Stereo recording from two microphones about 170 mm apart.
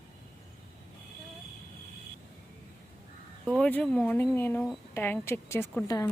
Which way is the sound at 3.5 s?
5° left (ahead or behind).